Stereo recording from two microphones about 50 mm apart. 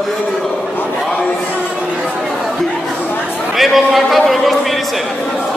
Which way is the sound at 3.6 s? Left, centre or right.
Centre.